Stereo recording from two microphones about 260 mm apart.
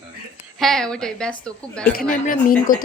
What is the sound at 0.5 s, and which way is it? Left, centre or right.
Speech, centre.